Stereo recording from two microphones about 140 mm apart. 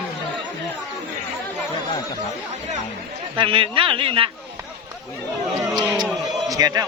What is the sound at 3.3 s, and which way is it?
Speech, 40° right (ahead or behind).